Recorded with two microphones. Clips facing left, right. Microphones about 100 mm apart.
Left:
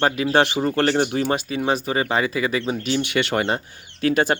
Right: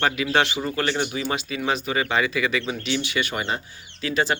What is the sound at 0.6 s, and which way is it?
Speech, 50° left (ahead or behind).